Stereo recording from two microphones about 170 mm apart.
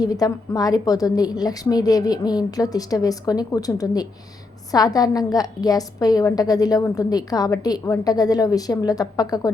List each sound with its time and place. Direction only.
0.0 s a woman's voice: 20° left (ahead or behind)